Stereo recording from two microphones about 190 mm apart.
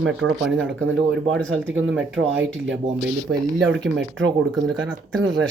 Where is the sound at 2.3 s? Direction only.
75° right (ahead or behind).